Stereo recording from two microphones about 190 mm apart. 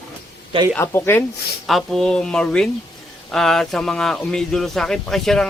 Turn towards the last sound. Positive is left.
turn(degrees=0)  # may be behind; listen again after turning